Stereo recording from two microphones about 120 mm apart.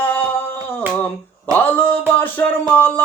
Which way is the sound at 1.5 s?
15° left (ahead or behind).